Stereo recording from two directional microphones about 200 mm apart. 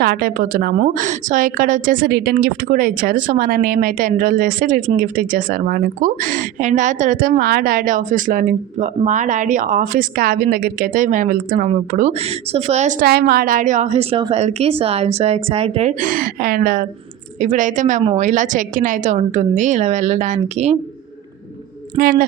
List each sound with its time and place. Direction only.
0.0 s a woman's voice: 50° right (ahead or behind); by 13.1 s 35° right (ahead or behind)
13.1 s a woman's voice: 50° right (ahead or behind); by 20.7 s 35° right (ahead or behind)
21.9 s a woman's voice: 45° right (ahead or behind)